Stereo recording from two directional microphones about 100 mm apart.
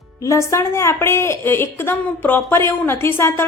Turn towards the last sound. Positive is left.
turn(degrees=25)  # may be behind; listen again after turning